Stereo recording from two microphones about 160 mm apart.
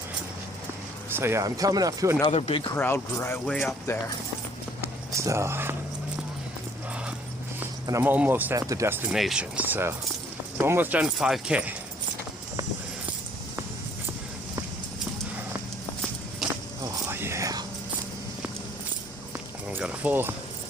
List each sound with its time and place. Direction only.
1.1 s speech: 15° right (ahead or behind)
2.2 s speech: 35° left (ahead or behind)
2.7 s speech: 15° left (ahead or behind)
5.1 s speech: 20° right (ahead or behind)
7.6 s speech: 15° right (ahead or behind)
9.1 s speech: 5° right (ahead or behind)
16.8 s whispering: 15° right (ahead or behind)
19.6 s a sound: 5° right (ahead or behind)